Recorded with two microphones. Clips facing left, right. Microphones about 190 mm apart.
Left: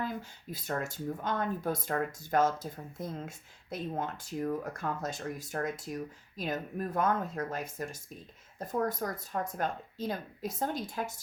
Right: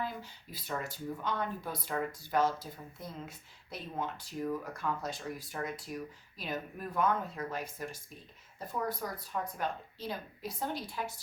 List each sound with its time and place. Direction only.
0.0 s speech: 45° left (ahead or behind)